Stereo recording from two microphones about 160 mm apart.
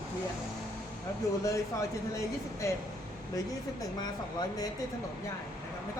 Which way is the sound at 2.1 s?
20° left (ahead or behind).